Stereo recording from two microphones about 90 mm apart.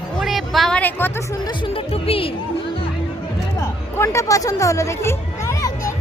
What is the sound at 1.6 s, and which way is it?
Speech, 90° left.